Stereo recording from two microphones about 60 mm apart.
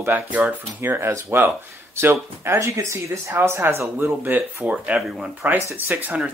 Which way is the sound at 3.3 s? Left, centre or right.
Right.